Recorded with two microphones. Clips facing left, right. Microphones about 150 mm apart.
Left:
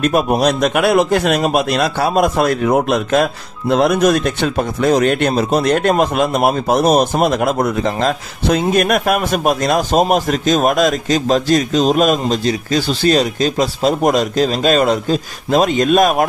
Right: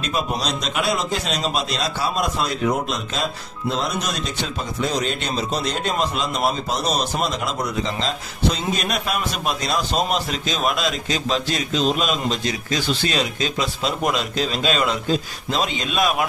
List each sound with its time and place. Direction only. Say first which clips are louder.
0.0 s a man's voice: left 11 dB; 55° left (ahead or behind)
12.4 s speech: left 7 dB; 35° left (ahead or behind)